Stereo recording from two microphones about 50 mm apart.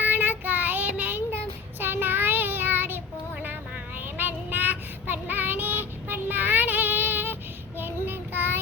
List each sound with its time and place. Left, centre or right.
0.0 s child singing: right
1.8 s child singing: right
4.0 s child singing: right